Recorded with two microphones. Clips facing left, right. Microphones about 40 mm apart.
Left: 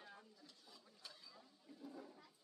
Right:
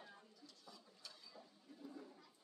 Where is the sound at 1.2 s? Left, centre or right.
Centre.